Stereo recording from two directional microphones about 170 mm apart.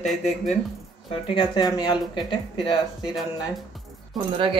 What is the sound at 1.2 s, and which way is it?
Speech, 25° left (ahead or behind).